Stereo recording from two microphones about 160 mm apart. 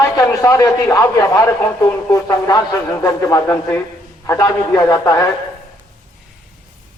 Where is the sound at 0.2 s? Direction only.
20° left (ahead or behind).